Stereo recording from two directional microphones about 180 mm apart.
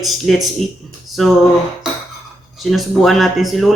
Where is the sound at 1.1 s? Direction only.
Centre (ahead or behind).